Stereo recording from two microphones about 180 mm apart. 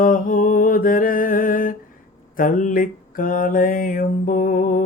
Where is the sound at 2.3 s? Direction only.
50° left (ahead or behind).